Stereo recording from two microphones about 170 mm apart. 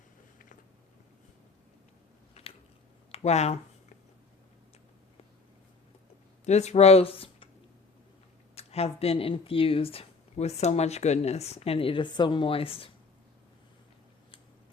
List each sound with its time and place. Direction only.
2.4 s biting: 35° left (ahead or behind)
3.1 s speech: 40° left (ahead or behind)
6.4 s speech: 40° left (ahead or behind)
8.5 s speech: 35° left (ahead or behind)